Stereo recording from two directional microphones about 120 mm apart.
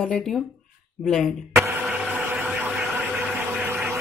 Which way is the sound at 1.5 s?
15° right (ahead or behind).